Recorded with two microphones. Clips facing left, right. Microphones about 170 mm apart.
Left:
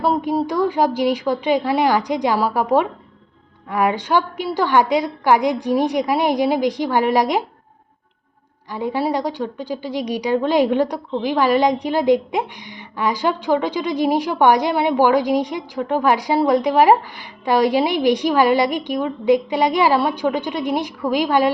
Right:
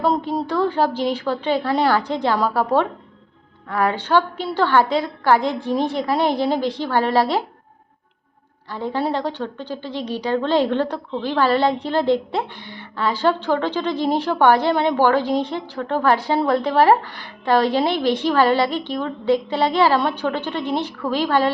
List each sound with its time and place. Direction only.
0.0 s a woman's voice: 10° left (ahead or behind)
8.7 s a woman's voice: 10° left (ahead or behind)